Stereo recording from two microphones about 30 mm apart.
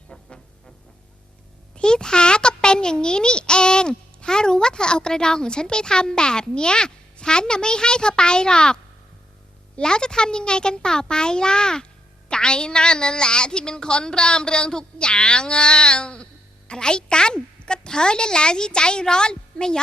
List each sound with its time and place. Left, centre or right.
0.1 s music: left
1.7 s a child's voice: left
9.8 s a woman's voice: left